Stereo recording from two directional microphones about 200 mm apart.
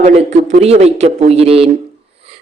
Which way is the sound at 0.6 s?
30° right (ahead or behind).